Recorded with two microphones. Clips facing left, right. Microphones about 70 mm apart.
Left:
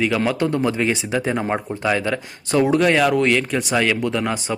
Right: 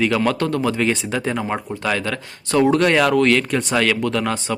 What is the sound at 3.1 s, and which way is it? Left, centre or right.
Speech, centre.